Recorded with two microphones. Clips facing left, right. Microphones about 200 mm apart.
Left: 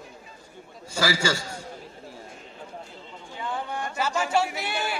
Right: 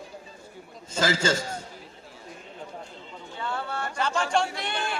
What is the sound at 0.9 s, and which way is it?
Speech, 20° right (ahead or behind).